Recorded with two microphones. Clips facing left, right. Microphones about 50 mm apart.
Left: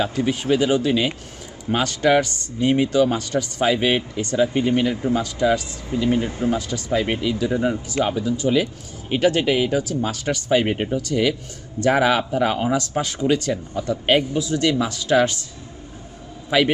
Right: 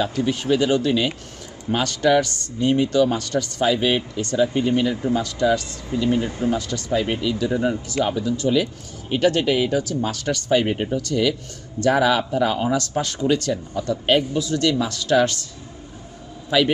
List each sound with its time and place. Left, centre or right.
0.0 s a man's voice: centre
16.5 s a man's voice: left